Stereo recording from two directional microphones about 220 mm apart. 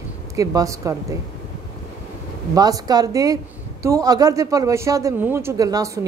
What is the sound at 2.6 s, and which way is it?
A woman's voice, 15° right (ahead or behind).